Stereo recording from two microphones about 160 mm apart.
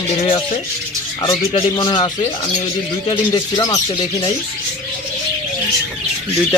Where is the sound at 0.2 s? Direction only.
35° left (ahead or behind).